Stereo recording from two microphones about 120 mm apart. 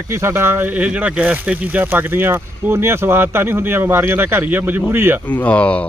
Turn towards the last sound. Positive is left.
turn(degrees=10)  # may be behind; listen again after turning